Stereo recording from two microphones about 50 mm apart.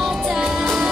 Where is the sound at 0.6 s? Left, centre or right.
Centre.